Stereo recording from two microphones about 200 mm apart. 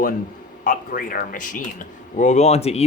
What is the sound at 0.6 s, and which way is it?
Speech, 40° left (ahead or behind).